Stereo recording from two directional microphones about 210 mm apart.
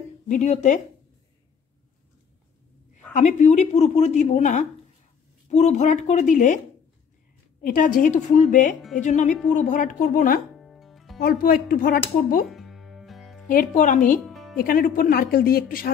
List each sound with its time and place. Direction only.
0.3 s speech: 35° left (ahead or behind)
3.1 s speech: 35° left (ahead or behind)
7.6 s speech: 40° left (ahead or behind)
10.6 s music: centre (ahead or behind)
11.1 s speech: 45° left (ahead or behind)
12.4 s music: centre (ahead or behind)
13.5 s speech: 40° left (ahead or behind)
14.2 s music: centre (ahead or behind)
14.6 s speech: 40° left (ahead or behind)